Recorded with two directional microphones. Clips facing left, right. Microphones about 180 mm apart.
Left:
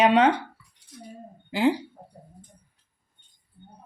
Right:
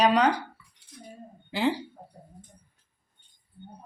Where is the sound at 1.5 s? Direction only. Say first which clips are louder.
Left 4 dB; 10° left (ahead or behind).